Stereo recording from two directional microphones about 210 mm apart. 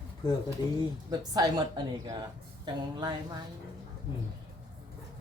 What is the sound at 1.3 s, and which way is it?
Speech, 20° right (ahead or behind).